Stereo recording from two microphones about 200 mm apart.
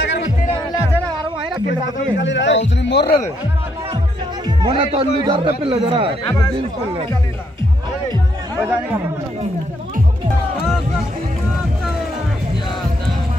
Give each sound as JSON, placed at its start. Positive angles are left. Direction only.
{"t": 2.1, "sound": "a man's voice", "side_deg": 65}
{"t": 4.6, "sound": "speech", "side_deg": -25}